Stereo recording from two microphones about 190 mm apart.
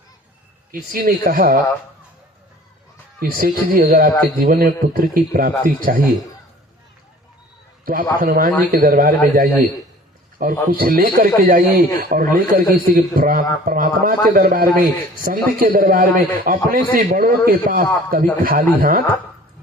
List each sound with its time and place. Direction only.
0.7 s a man's voice: 45° right (ahead or behind)
3.2 s a man's voice: 50° right (ahead or behind)
8.2 s a man's voice: 50° right (ahead or behind)